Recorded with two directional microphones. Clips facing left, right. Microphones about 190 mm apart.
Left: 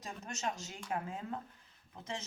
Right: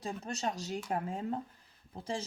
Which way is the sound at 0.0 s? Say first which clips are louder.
Right 4 dB; 35° right (ahead or behind).